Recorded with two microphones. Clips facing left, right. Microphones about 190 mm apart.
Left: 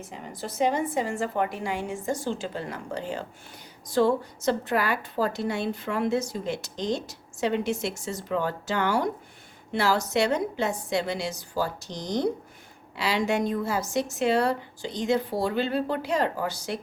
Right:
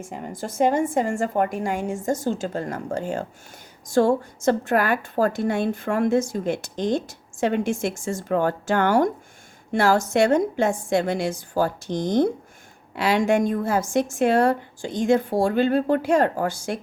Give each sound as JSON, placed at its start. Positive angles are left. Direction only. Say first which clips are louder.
{"t": 0.0, "sound": "a woman's voice", "louder": "right 5 dB", "side_deg": -50}